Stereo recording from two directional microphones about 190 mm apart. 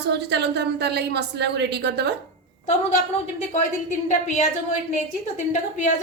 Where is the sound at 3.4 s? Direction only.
40° left (ahead or behind).